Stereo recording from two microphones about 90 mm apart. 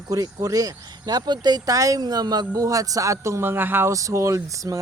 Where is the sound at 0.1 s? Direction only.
40° right (ahead or behind); by 3.9 s 25° right (ahead or behind).